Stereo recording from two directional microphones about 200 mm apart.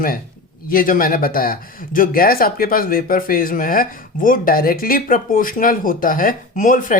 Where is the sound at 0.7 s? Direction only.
45° left (ahead or behind).